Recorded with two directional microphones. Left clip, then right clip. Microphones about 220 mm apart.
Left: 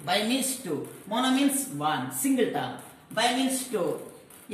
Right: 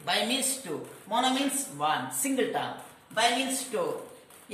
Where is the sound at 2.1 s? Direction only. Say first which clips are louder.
Left 2 dB; 25° right (ahead or behind).